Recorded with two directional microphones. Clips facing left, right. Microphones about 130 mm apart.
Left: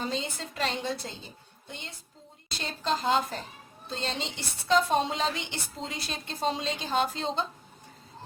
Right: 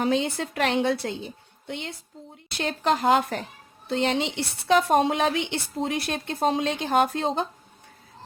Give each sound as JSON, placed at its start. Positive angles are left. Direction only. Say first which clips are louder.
{"t": 0.0, "sound": "a woman's voice", "louder": "right 9 dB", "side_deg": -65}